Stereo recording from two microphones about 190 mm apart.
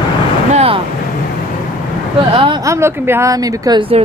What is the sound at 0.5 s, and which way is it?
Vehicle, 30° right (ahead or behind).